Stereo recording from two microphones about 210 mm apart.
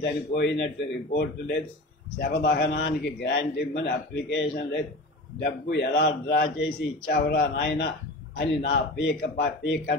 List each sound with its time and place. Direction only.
0.0 s a man's voice: 55° left (ahead or behind)